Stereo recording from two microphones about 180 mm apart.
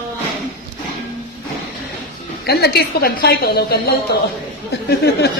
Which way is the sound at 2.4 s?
65° left (ahead or behind).